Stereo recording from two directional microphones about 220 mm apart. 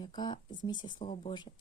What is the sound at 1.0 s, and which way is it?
Speech, 35° left (ahead or behind).